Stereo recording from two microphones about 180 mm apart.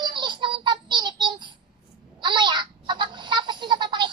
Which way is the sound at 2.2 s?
25° right (ahead or behind).